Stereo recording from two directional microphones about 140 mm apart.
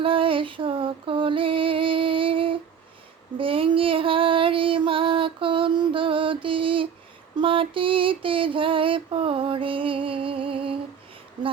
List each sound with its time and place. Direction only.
0.0 s music: 40° right (ahead or behind)
3.3 s female singing: 40° right (ahead or behind)